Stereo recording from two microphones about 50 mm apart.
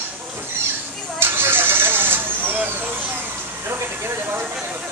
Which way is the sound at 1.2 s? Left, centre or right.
Right.